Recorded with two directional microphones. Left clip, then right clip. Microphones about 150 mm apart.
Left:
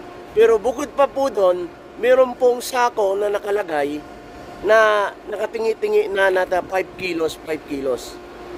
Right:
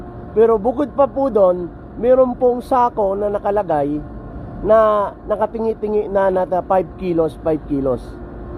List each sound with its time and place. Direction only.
0.3 s speech: centre (ahead or behind)
3.2 s speech: 45° left (ahead or behind)
3.8 s speech: centre (ahead or behind)
4.6 s speech: 35° left (ahead or behind)
5.4 s speech: 5° right (ahead or behind)
6.1 s speech: 40° left (ahead or behind)
6.7 s speech: 10° right (ahead or behind)